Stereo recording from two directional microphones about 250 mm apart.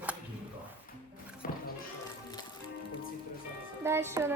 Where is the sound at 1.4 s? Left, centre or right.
Left.